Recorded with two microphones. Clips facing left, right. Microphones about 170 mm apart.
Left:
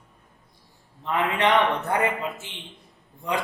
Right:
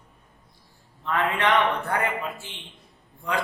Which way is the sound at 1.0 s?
20° left (ahead or behind).